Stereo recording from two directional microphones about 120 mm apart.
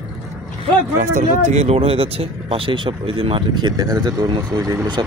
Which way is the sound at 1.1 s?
70° right (ahead or behind).